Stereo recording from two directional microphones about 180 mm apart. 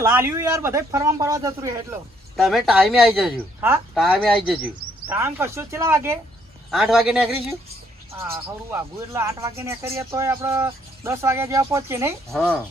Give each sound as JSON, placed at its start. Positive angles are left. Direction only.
{"t": 0.0, "sound": "speech", "side_deg": -15}
{"t": 2.3, "sound": "speech", "side_deg": 0}
{"t": 4.6, "sound": "speech", "side_deg": -10}
{"t": 6.7, "sound": "speech", "side_deg": 0}
{"t": 8.1, "sound": "speech", "side_deg": -15}
{"t": 12.3, "sound": "speech", "side_deg": 0}